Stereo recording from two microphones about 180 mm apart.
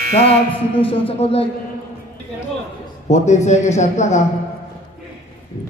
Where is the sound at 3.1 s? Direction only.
40° left (ahead or behind).